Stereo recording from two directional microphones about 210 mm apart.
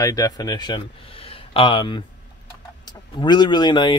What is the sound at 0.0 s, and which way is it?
Speech, 15° left (ahead or behind).